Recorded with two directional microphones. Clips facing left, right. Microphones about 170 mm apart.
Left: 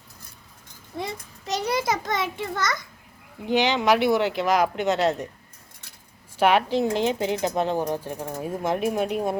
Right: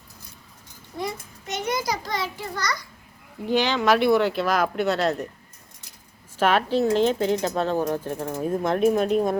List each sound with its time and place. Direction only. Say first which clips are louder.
1.5 s a child's voice: left 2 dB; 35° left (ahead or behind); by 5.1 s 15° left (ahead or behind)
6.3 s speech: left 1 dB; 15° left (ahead or behind)